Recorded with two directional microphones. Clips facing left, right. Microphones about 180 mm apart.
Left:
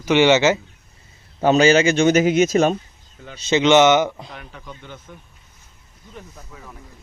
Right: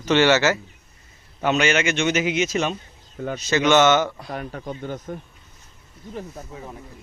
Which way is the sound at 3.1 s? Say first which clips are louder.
Right 12 dB; 50° right (ahead or behind).